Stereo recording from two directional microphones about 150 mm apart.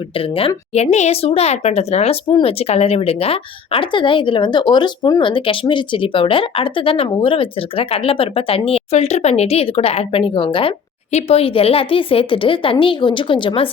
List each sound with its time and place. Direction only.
0.2 s a woman's voice: 40° left (ahead or behind)